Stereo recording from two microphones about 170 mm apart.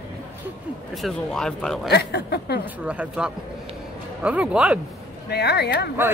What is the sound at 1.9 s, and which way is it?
Speech, 70° left (ahead or behind).